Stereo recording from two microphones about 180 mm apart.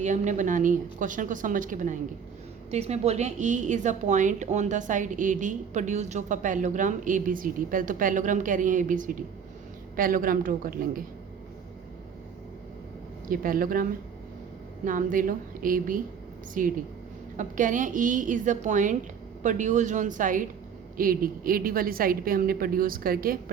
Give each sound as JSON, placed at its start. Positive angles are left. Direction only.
{"t": 0.0, "sound": "a woman's voice", "side_deg": -45}
{"t": 13.2, "sound": "a woman's voice", "side_deg": -50}
{"t": 14.8, "sound": "a woman's voice", "side_deg": -50}